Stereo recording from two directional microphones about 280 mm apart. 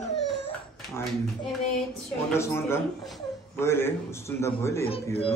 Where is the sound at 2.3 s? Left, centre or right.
Centre.